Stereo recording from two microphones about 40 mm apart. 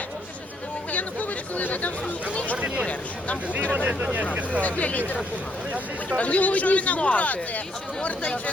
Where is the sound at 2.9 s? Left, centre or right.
Left.